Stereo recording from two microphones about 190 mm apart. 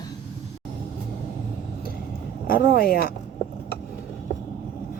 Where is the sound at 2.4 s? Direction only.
50° left (ahead or behind).